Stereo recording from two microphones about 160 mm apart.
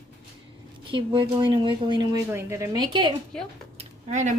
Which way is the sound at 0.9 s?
30° right (ahead or behind).